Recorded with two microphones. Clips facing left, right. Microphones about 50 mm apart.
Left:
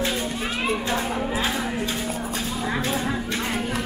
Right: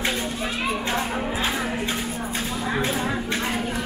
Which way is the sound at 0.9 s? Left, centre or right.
Centre.